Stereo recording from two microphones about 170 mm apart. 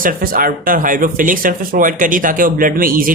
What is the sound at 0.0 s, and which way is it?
Speech, 55° right (ahead or behind).